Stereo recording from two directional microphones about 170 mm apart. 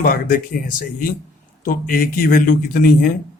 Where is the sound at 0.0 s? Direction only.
55° left (ahead or behind).